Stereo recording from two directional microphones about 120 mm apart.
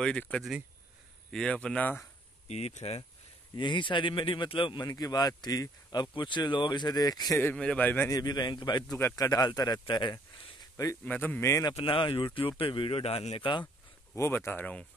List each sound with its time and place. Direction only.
0.0 s speech: 10° left (ahead or behind)
2.4 s speech: 65° left (ahead or behind)
3.5 s speech: 40° left (ahead or behind)
7.3 s speech: 10° left (ahead or behind)
8.1 s speech: 35° left (ahead or behind)
11.1 s speech: 15° left (ahead or behind)
11.7 s speech: 45° left (ahead or behind)
14.1 s speech: 20° left (ahead or behind)